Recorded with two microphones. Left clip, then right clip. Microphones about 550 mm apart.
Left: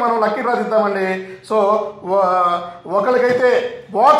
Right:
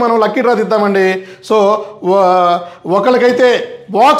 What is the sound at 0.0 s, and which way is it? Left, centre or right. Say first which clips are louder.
Speech: right 5 dB; right.